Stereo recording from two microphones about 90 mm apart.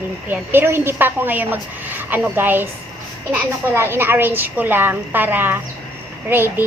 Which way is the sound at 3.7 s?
25° right (ahead or behind).